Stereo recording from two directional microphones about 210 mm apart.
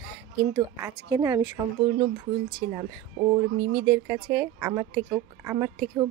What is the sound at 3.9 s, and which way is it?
A woman's voice, 10° right (ahead or behind).